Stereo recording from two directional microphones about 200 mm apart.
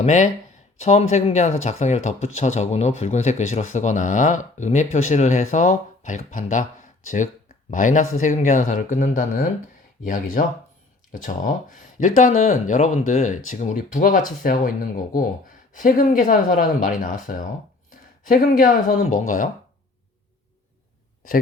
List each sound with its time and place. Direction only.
0.0 s speech: 35° left (ahead or behind)